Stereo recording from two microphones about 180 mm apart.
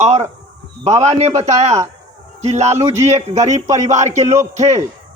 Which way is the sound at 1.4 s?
40° right (ahead or behind).